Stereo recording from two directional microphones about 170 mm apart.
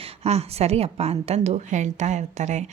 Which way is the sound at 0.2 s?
40° right (ahead or behind).